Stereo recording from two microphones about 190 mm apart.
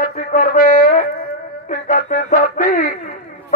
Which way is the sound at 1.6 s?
45° left (ahead or behind).